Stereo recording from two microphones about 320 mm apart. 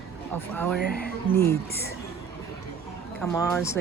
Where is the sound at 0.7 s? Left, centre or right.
Left.